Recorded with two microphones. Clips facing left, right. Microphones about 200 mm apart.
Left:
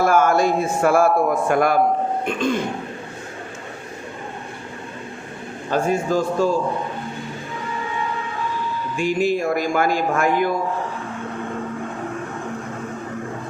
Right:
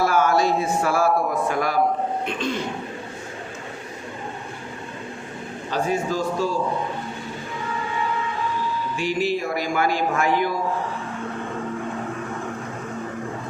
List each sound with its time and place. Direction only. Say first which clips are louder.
0.0 s a man's voice: left 3 dB; 50° left (ahead or behind)
5.7 s a man's voice: left 4 dB; 50° left (ahead or behind)
9.0 s a man's voice: left 4 dB; 45° left (ahead or behind)